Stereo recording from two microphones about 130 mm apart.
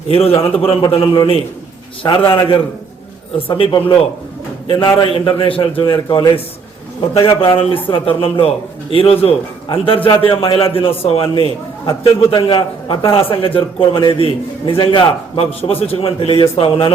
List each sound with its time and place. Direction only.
0.1 s a man's voice: 45° left (ahead or behind)
4.9 s a man's voice: 40° left (ahead or behind)
14.1 s a man's voice: 45° right (ahead or behind)
14.7 s a man's voice: 40° left (ahead or behind)